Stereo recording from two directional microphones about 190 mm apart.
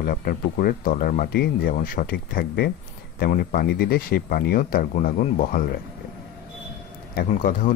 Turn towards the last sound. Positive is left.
turn(degrees=45)  # may be behind; listen again after turning